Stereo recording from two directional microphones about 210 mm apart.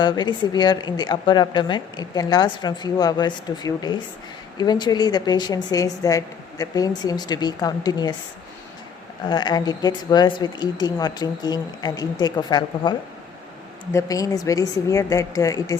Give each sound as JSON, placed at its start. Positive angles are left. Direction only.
{"t": 0.0, "sound": "speech", "side_deg": 20}
{"t": 9.3, "sound": "a woman's voice", "side_deg": 20}